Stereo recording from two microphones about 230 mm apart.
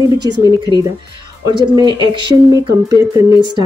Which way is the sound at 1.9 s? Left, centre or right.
Centre.